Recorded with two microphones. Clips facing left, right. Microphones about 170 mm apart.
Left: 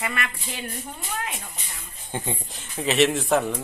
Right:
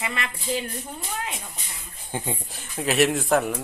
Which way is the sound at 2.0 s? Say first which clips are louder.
Even; 5° right (ahead or behind).